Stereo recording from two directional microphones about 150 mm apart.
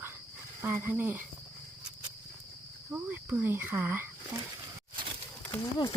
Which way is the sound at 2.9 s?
10° right (ahead or behind).